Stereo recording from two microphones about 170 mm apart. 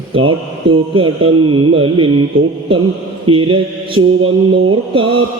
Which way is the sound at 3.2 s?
30° right (ahead or behind).